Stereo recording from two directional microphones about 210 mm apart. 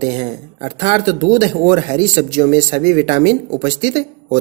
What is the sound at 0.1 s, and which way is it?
Speech, 25° right (ahead or behind).